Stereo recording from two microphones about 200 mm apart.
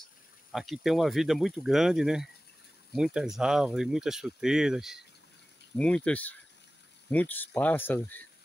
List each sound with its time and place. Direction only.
0.5 s speech: centre (ahead or behind)